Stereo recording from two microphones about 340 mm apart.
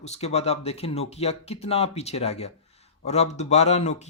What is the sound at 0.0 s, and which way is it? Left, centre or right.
Speech, centre.